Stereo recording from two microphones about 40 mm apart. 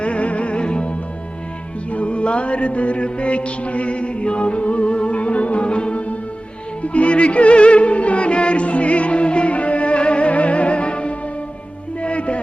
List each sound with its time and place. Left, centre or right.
0.0 s music: left